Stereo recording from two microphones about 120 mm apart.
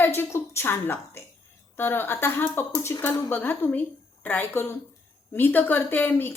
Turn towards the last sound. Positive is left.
turn(degrees=15)  # may be behind; listen again after turning